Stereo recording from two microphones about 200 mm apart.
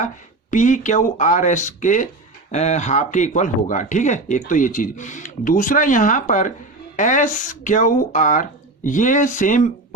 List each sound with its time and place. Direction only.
0.5 s speech: 40° left (ahead or behind)